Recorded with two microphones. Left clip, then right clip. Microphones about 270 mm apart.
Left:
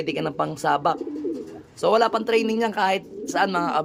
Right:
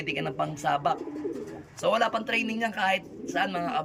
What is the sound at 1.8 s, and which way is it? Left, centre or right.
Speech, centre.